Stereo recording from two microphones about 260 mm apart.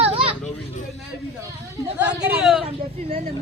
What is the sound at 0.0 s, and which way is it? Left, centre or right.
Children playing, right.